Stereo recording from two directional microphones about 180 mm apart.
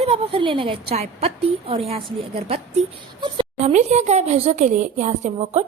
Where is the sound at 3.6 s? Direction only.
40° right (ahead or behind).